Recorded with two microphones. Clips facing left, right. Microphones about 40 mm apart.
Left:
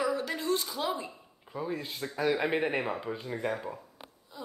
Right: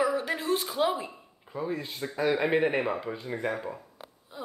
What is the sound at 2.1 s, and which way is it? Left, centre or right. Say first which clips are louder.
Speech: right 3 dB; centre.